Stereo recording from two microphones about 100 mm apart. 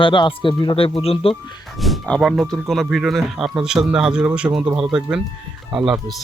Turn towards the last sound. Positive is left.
turn(degrees=-5)  # may be behind; listen again after turning